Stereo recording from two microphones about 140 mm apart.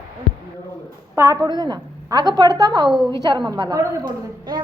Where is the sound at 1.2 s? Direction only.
25° right (ahead or behind).